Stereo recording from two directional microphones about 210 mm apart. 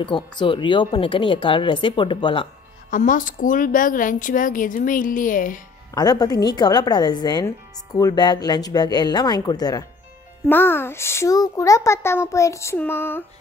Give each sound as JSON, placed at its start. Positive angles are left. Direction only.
{"t": 0.0, "sound": "speech", "side_deg": 25}
{"t": 2.9, "sound": "a woman's voice", "side_deg": 40}
{"t": 5.9, "sound": "a child's voice", "side_deg": 20}